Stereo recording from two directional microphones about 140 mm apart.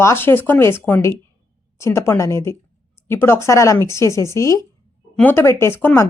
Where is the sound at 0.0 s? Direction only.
20° left (ahead or behind).